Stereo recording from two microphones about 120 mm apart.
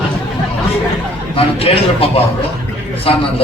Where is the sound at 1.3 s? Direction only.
50° left (ahead or behind).